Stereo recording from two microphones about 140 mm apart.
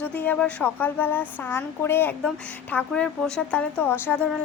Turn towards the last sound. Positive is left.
turn(degrees=15)  # may be behind; listen again after turning